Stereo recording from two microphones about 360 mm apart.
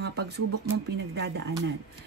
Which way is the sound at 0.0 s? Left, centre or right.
Right.